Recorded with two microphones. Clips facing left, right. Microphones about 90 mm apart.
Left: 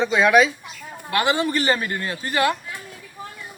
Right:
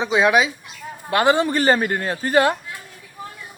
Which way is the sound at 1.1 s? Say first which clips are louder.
Right 4 dB; 35° right (ahead or behind).